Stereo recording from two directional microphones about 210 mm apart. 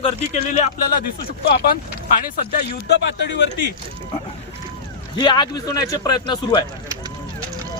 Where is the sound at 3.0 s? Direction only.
55° left (ahead or behind).